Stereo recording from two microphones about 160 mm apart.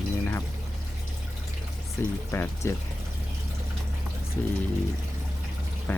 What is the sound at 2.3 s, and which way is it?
Speech, 15° left (ahead or behind).